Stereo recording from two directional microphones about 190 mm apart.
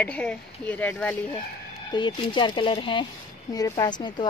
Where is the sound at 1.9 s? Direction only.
25° left (ahead or behind).